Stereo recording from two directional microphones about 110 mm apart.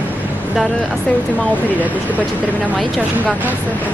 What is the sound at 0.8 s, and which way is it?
Speech, 10° left (ahead or behind).